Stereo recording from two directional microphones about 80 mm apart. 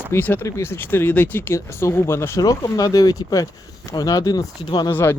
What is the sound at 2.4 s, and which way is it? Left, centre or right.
Speech, left.